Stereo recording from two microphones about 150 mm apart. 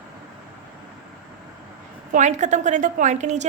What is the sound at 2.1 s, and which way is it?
A woman's voice, 50° right (ahead or behind).